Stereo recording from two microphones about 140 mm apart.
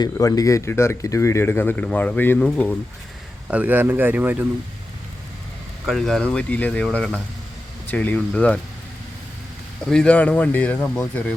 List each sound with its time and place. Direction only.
0.0 s speech: 25° left (ahead or behind)
3.5 s speech: 10° right (ahead or behind)
5.8 s speech: centre (ahead or behind)
9.8 s speech: 5° left (ahead or behind)